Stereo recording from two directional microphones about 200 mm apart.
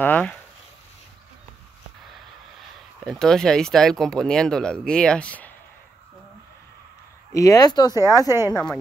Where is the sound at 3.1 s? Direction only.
Centre (ahead or behind).